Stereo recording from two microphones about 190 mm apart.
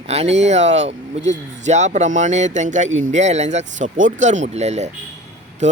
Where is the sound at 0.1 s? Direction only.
35° right (ahead or behind).